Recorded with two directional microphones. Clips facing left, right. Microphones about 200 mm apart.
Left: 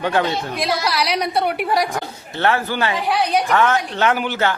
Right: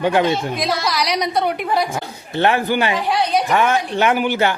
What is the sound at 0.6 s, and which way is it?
A woman's voice, 5° left (ahead or behind).